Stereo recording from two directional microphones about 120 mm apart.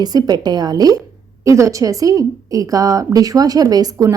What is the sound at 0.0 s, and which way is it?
A woman's voice, 35° right (ahead or behind).